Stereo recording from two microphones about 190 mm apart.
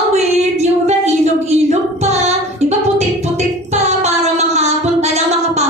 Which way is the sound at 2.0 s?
35° right (ahead or behind).